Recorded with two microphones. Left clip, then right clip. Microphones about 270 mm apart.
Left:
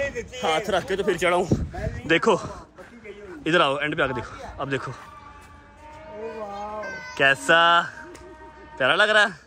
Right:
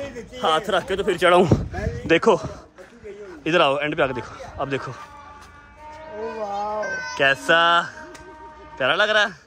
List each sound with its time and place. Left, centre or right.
0.4 s a man's voice: centre
1.2 s a man's voice: right
1.8 s a man's voice: centre
6.4 s music: right
7.2 s a man's voice: centre